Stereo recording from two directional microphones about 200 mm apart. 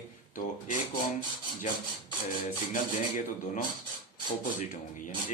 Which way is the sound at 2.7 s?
40° left (ahead or behind).